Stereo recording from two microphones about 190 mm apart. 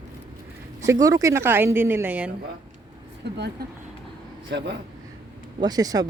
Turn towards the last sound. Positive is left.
turn(degrees=-20)  # may be behind; listen again after turning